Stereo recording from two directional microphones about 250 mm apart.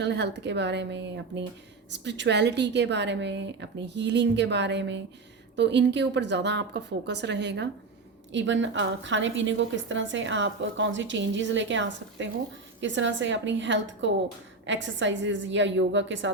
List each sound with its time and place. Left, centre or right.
0.0 s a woman's voice: right